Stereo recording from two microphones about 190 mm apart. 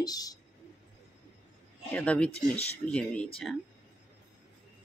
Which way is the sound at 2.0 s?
5° left (ahead or behind).